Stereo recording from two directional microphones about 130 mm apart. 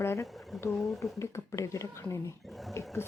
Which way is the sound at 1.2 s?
20° left (ahead or behind).